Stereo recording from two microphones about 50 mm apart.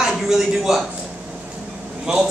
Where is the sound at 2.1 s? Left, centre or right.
Centre.